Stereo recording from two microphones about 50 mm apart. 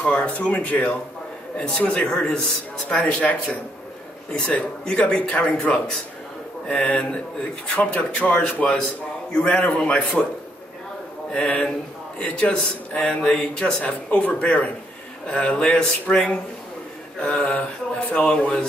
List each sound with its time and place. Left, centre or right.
0.0 s a man's voice: left
2.0 s a man's voice: centre
11.3 s a man's voice: centre
13.8 s a man's voice: left
17.2 s a man's voice: left